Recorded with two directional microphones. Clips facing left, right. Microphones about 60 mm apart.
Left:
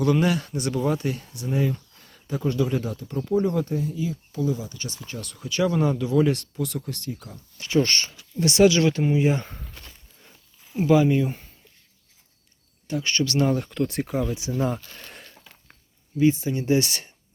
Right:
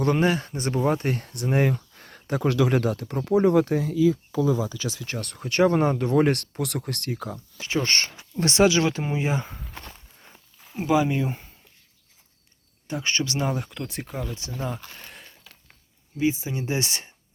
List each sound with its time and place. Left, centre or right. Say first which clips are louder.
0.0 s speech: even; right
5.1 s speech: right 3 dB; right
7.7 s speech: left 4 dB; right
7.9 s speech: right 2 dB; right
8.4 s speech: left 2 dB; right
9.3 s a sound: left 1 dB; centre
10.7 s speech: left 3 dB; centre
12.9 s speech: left 2 dB; right
13.4 s speech: left 5 dB; centre
14.9 s a sound: left 1 dB; centre
16.1 s speech: left 4 dB; centre